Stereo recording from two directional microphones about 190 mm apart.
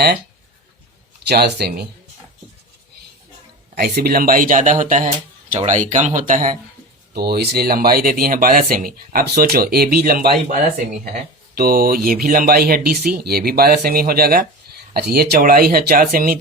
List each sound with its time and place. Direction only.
1.3 s speech: 60° right (ahead or behind)
3.8 s speech: 55° right (ahead or behind)
7.1 s speech: 55° right (ahead or behind)